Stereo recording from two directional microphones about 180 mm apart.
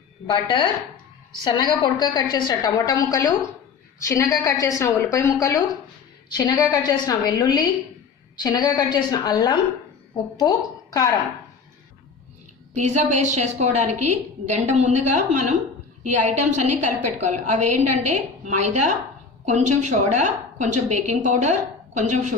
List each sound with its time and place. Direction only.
1.4 s a woman's voice: 25° left (ahead or behind)
12.7 s a woman's voice: 40° right (ahead or behind)